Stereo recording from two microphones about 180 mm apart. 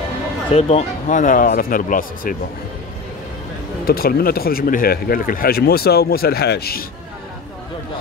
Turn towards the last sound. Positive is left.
turn(degrees=60)  # may be behind; listen again after turning